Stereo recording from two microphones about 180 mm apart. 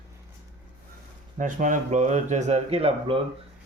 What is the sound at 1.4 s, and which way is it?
Speech, 45° right (ahead or behind).